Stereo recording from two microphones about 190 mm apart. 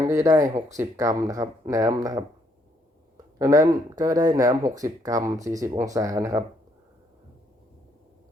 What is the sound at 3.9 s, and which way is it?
Speech, 20° right (ahead or behind).